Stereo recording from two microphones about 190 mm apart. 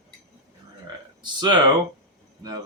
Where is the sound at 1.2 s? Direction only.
20° right (ahead or behind).